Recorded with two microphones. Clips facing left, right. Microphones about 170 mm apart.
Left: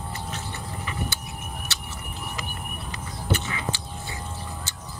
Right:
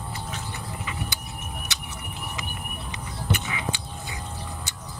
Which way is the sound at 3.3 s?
15° right (ahead or behind).